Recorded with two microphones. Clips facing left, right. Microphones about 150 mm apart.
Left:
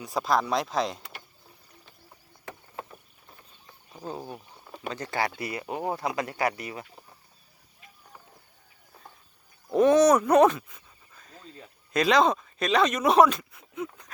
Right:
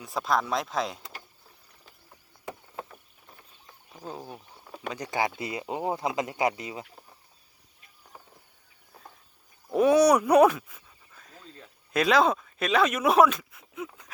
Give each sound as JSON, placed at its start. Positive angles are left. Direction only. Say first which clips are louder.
{"t": 0.0, "sound": "speech", "louder": "left 2 dB", "side_deg": 0}
{"t": 3.9, "sound": "a sound", "louder": "left 3 dB", "side_deg": 5}
{"t": 4.9, "sound": "speech", "louder": "right 1 dB", "side_deg": -15}
{"t": 9.6, "sound": "speech", "louder": "left 1 dB", "side_deg": -5}